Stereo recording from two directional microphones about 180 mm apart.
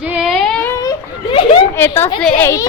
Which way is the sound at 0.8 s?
25° left (ahead or behind).